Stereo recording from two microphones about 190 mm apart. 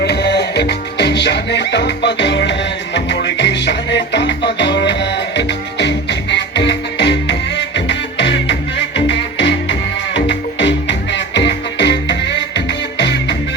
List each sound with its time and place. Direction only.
0.0 s music: 60° left (ahead or behind)